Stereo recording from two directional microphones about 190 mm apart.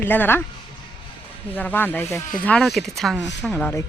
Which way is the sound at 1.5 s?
10° left (ahead or behind).